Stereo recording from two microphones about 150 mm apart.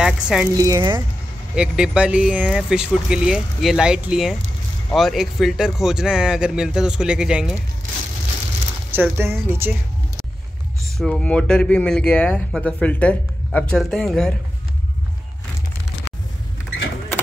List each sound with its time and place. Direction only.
0.0 s speech: 5° right (ahead or behind)
0.6 s speech: 25° right (ahead or behind)
1.5 s speech: 5° right (ahead or behind)
8.9 s a woman's voice: 15° right (ahead or behind)
11.0 s speech: 5° left (ahead or behind)